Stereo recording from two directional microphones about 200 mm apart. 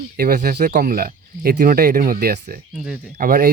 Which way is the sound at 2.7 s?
5° right (ahead or behind).